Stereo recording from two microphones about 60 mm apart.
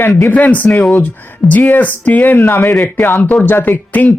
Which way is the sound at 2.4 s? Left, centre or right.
Left.